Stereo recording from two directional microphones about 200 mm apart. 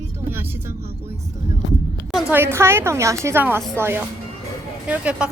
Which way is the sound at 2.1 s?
10° right (ahead or behind).